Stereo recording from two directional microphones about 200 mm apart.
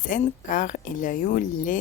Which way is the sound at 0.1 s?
45° left (ahead or behind).